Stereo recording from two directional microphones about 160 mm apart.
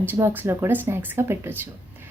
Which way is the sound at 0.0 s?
15° right (ahead or behind).